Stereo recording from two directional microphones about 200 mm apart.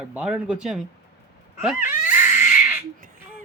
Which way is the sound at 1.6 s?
5° right (ahead or behind).